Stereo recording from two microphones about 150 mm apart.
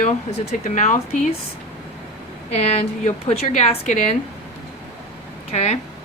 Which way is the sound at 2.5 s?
45° left (ahead or behind).